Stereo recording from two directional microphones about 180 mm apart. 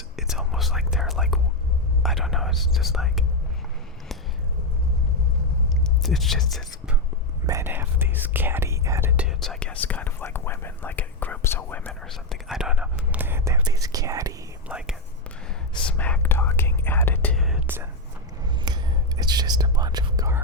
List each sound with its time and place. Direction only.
0.2 s whispering: centre (ahead or behind)
5.6 s whispering: centre (ahead or behind)
7.4 s whispering: 15° right (ahead or behind)
14.7 s whispering: 5° right (ahead or behind)
15.9 s whispering: 5° left (ahead or behind)
17.3 s whispering: centre (ahead or behind)
18.6 s whispering: 25° right (ahead or behind)